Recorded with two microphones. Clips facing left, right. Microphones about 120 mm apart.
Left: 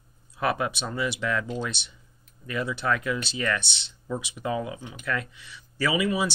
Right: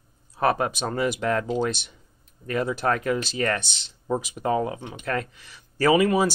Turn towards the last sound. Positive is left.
turn(degrees=-45)  # may be behind; listen again after turning